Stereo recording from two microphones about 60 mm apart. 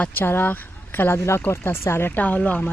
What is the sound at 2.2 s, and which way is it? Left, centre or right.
Speech, left.